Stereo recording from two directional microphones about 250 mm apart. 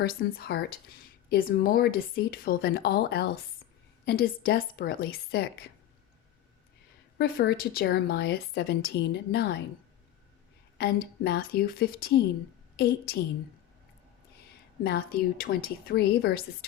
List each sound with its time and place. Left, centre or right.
0.0 s a woman's voice: left
7.2 s a woman's voice: left
10.8 s a woman's voice: left
14.8 s a woman's voice: left